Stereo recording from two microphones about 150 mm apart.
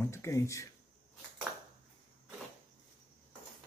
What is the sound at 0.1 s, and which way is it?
Speech, 20° left (ahead or behind).